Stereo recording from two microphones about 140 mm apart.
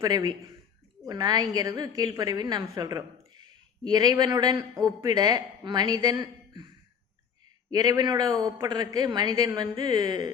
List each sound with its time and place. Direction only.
0.0 s speech: 25° right (ahead or behind)
7.7 s speech: 25° right (ahead or behind)